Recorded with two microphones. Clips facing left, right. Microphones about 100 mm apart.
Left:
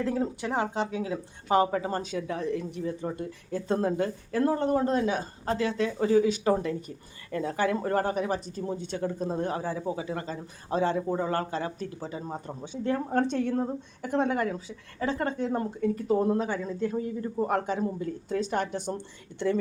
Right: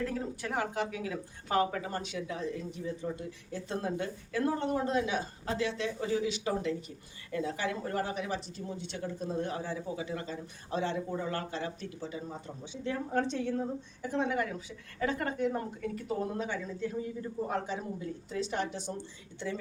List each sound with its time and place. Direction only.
0.0 s speech: 25° left (ahead or behind); by 14.3 s 60° left (ahead or behind)
14.3 s speech: 40° left (ahead or behind)
14.9 s speech: 30° left (ahead or behind)
17.4 s speech: 55° left (ahead or behind)